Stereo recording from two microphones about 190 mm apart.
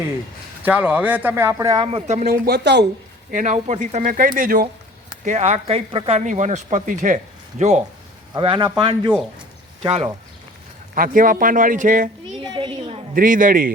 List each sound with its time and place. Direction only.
0.6 s speech: 10° right (ahead or behind)
1.9 s speech: 35° right (ahead or behind)
2.2 s speech: 50° right (ahead or behind)
3.3 s speech: 40° right (ahead or behind)
8.3 s speech: 25° right (ahead or behind)
10.9 s speech: 45° right (ahead or behind)
12.4 s a sound: 25° right (ahead or behind)
13.1 s speech: 45° right (ahead or behind)